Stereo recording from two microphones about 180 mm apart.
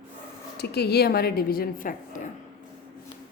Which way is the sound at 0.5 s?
65° left (ahead or behind).